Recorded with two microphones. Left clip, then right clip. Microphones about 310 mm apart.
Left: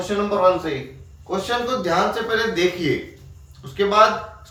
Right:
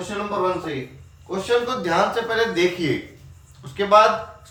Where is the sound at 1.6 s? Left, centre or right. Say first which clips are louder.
Left 1 dB; centre.